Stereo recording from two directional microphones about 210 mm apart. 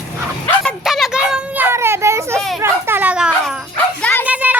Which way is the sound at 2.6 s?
10° right (ahead or behind).